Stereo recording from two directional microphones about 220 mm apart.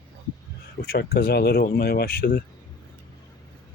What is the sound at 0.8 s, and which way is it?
Speech, 45° left (ahead or behind).